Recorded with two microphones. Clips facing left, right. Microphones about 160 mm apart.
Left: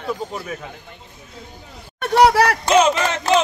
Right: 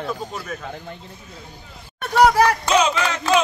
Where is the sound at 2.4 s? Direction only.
75° left (ahead or behind).